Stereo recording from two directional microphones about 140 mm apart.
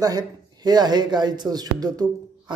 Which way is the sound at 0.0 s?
30° right (ahead or behind).